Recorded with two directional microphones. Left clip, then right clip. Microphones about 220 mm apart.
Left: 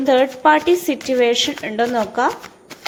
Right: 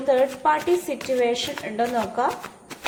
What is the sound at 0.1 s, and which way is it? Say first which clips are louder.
A woman's voice: left 6 dB; 35° left (ahead or behind).